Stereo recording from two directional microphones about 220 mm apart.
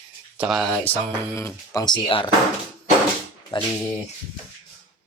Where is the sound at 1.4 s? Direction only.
15° left (ahead or behind).